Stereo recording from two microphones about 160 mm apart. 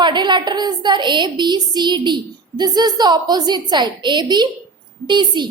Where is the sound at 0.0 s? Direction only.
30° right (ahead or behind).